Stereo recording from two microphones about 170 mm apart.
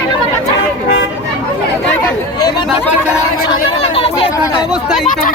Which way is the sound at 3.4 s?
35° left (ahead or behind).